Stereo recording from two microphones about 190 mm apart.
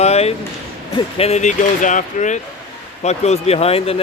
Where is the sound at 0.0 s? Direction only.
35° left (ahead or behind).